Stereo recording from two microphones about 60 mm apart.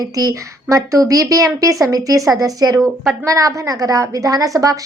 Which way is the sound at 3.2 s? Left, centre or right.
Right.